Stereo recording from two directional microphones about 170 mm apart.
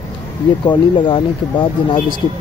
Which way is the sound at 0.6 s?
30° left (ahead or behind).